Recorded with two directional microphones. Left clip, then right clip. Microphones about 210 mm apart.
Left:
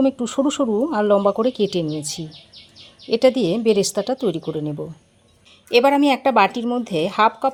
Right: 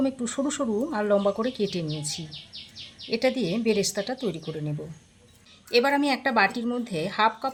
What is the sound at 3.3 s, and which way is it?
Speech, 25° left (ahead or behind).